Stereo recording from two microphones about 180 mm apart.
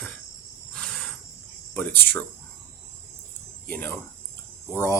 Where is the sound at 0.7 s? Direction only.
5° left (ahead or behind).